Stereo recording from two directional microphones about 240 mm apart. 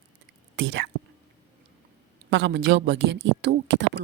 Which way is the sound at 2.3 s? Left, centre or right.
Right.